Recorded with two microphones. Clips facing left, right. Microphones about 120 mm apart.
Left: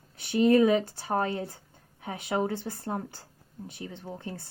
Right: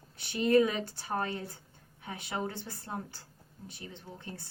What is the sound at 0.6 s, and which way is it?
Speech, 40° left (ahead or behind).